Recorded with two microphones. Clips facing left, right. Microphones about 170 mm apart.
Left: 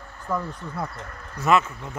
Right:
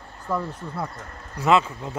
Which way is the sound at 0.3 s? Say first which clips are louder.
Right 1 dB; 10° right (ahead or behind).